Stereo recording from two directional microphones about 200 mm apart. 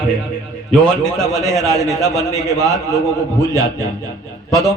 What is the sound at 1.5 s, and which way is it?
Speech, 15° right (ahead or behind).